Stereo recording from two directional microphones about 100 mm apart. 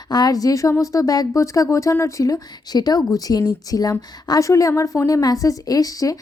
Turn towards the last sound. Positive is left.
turn(degrees=35)  # may be behind; listen again after turning